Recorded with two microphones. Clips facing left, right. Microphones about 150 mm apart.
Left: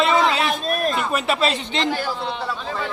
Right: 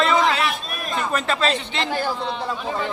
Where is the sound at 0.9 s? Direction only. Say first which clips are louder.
Left 1 dB; 10° left (ahead or behind).